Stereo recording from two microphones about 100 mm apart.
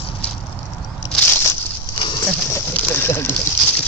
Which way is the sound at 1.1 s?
15° left (ahead or behind).